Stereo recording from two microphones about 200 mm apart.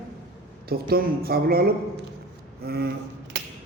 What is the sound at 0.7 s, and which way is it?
A man's voice, 50° right (ahead or behind).